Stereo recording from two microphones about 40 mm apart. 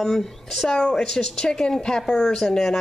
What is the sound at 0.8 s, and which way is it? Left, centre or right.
Speech, centre.